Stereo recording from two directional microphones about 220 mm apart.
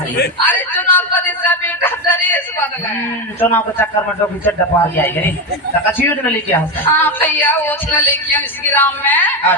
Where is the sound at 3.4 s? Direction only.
10° left (ahead or behind).